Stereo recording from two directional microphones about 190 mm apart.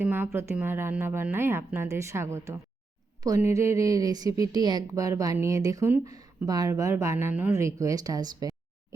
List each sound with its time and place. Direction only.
0.0 s a woman's voice: 10° right (ahead or behind)